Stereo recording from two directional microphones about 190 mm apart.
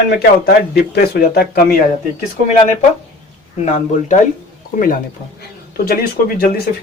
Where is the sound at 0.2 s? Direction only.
55° left (ahead or behind).